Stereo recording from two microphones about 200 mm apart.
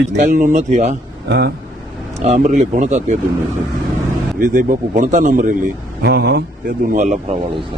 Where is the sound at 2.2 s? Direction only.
35° right (ahead or behind).